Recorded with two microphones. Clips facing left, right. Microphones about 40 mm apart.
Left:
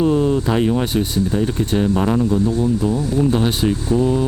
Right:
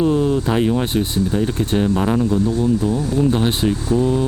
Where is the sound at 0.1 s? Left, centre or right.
Centre.